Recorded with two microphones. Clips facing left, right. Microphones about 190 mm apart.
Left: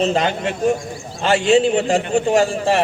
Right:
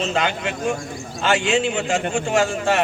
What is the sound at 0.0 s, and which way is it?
A man's voice, 35° left (ahead or behind).